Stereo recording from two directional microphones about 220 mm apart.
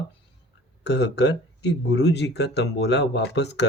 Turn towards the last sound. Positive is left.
turn(degrees=50)  # may be behind; listen again after turning